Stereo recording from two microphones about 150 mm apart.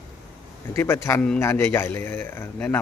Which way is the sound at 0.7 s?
20° left (ahead or behind).